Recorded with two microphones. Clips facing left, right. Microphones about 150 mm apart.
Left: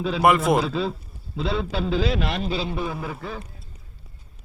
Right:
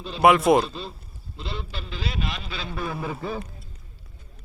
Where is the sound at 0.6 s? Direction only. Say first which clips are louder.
Left 8 dB; 90° left.